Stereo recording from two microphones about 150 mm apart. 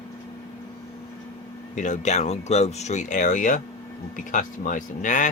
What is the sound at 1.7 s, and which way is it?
Speech, 55° left (ahead or behind).